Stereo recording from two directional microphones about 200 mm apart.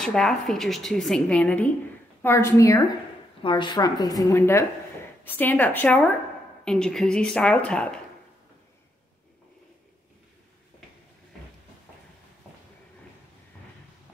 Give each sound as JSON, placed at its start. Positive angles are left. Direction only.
{"t": 0.0, "sound": "a woman's voice", "side_deg": 0}
{"t": 3.4, "sound": "a woman's voice", "side_deg": 25}